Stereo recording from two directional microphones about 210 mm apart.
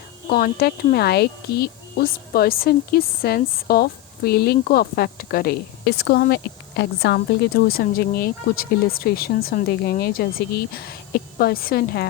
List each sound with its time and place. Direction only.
0.3 s a woman's voice: 45° left (ahead or behind)